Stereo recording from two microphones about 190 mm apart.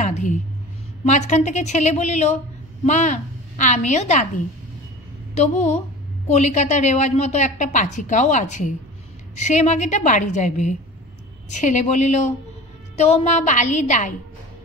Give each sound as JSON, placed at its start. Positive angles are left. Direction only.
{"t": 0.0, "sound": "a sound", "side_deg": 40}
{"t": 1.0, "sound": "a woman's voice", "side_deg": 40}
{"t": 5.3, "sound": "a woman's voice", "side_deg": 35}